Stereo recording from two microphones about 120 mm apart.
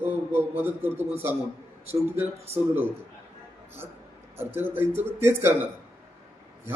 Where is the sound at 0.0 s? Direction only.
15° right (ahead or behind).